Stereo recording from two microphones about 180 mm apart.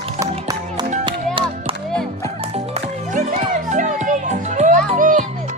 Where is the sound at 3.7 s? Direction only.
45° right (ahead or behind).